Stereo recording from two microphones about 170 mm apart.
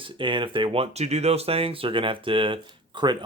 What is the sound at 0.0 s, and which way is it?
Speech, 30° right (ahead or behind).